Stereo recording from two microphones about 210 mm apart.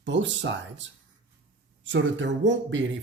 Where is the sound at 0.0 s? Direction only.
60° right (ahead or behind).